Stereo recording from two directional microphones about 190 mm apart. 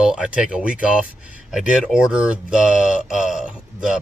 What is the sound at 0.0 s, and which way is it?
Speech, 5° right (ahead or behind).